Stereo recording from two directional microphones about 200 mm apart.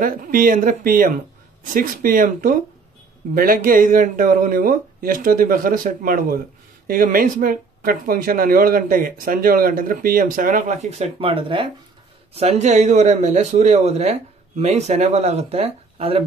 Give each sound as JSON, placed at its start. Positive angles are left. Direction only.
{"t": 0.0, "sound": "a man's voice", "side_deg": -45}